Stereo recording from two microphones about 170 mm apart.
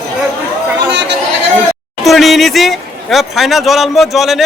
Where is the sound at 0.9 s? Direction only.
90° right.